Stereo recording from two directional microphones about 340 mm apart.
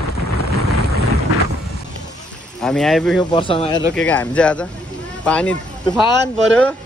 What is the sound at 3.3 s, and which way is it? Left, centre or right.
Speech, centre.